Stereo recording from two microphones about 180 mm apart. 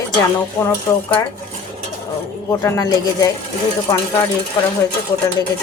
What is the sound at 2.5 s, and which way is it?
Speech, 15° left (ahead or behind).